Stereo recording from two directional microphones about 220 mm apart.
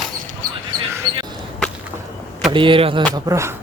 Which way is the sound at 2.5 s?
25° right (ahead or behind).